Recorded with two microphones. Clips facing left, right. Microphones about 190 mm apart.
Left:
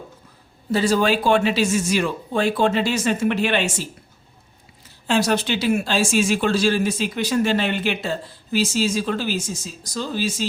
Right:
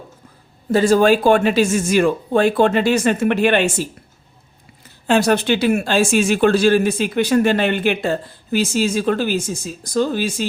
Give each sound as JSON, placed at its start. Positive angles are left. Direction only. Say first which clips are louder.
{"t": 0.7, "sound": "speech", "louder": "right 6 dB", "side_deg": -50}
{"t": 5.0, "sound": "speech", "louder": "right 5 dB", "side_deg": -55}